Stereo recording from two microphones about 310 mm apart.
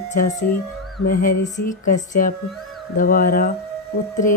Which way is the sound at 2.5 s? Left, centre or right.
Centre.